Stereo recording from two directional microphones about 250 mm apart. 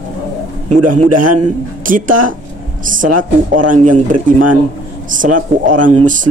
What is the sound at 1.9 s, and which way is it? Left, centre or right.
Speech, right.